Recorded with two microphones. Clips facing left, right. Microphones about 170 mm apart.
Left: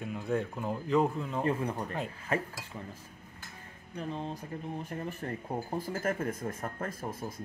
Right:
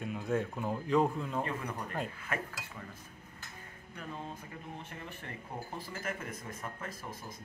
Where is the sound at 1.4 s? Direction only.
30° left (ahead or behind).